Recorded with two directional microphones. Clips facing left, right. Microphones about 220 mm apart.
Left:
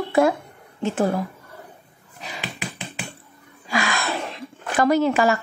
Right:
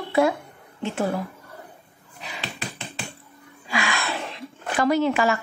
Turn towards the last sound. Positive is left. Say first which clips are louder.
# left 2 dB
turn(degrees=40)  # may be behind; listen again after turning